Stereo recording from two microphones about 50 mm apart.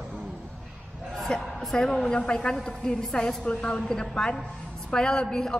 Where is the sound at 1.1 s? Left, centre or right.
Centre.